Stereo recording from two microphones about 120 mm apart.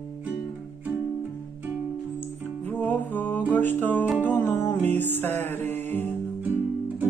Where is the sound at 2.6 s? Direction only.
15° left (ahead or behind).